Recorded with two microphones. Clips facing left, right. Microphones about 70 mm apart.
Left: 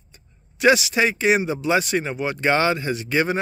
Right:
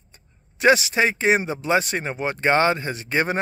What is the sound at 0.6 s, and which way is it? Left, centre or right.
Speech, right.